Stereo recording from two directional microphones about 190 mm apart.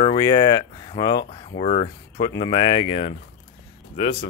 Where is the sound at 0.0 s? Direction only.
25° left (ahead or behind).